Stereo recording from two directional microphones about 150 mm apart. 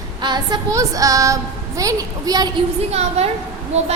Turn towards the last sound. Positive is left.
turn(degrees=-45)  # may be behind; listen again after turning